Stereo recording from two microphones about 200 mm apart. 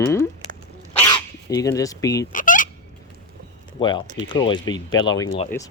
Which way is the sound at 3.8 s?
25° left (ahead or behind).